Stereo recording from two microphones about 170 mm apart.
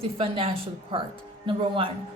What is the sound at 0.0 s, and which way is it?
A woman's voice, 35° right (ahead or behind).